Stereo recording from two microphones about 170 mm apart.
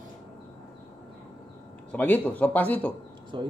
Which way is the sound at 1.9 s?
10° left (ahead or behind).